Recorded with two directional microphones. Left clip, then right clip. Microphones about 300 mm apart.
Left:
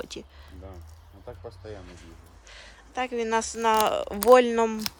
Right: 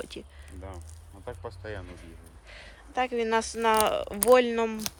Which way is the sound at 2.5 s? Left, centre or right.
Centre.